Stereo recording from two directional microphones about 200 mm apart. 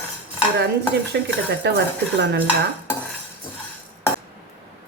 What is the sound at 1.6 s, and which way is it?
Speech, 60° right (ahead or behind).